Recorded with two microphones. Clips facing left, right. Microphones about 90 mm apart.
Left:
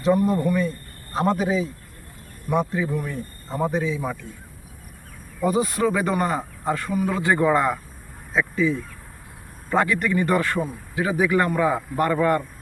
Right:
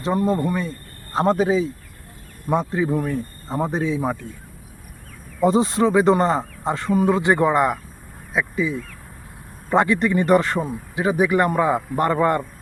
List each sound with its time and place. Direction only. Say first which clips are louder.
0.3 s a man's voice: even; 30° right (ahead or behind)
5.4 s a man's voice: right 4 dB; 25° right (ahead or behind)
9.6 s a man's voice: right 3 dB; 25° right (ahead or behind)